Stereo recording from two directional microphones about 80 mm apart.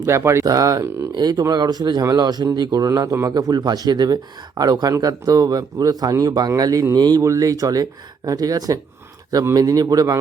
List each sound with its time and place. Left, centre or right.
0.1 s speech: right
0.4 s speech: right
1.1 s speech: right
3.2 s speech: right
7.3 s speech: right